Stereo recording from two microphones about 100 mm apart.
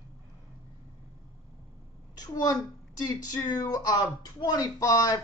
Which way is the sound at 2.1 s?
40° left (ahead or behind).